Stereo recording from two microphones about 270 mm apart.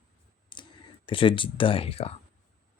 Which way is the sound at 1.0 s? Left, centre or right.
Centre.